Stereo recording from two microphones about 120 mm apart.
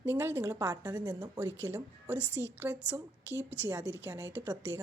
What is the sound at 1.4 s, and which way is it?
A woman's voice, 15° right (ahead or behind).